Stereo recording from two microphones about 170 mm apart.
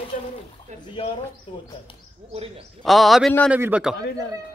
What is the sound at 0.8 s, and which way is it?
Speech, 30° left (ahead or behind).